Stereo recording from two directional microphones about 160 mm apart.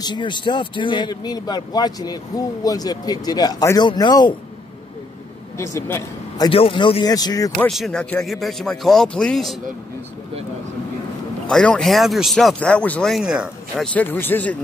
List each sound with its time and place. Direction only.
0.0 s speech: 30° left (ahead or behind)
5.6 s a man's voice: 20° left (ahead or behind)
6.5 s speech: 35° left (ahead or behind)
7.5 s speech: 5° left (ahead or behind)
11.4 s speech: 5° left (ahead or behind)
13.9 s speech: 15° left (ahead or behind)